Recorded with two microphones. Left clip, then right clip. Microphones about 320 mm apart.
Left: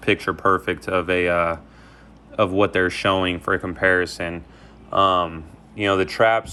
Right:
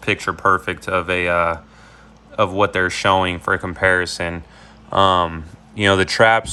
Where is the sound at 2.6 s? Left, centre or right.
Centre.